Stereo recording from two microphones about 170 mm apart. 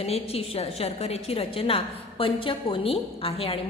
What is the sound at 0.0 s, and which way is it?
A woman's voice, 35° left (ahead or behind).